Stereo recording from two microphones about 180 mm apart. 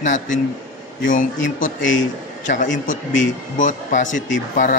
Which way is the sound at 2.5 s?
45° left (ahead or behind).